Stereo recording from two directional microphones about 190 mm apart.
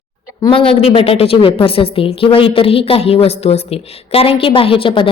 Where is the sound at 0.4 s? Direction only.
30° left (ahead or behind).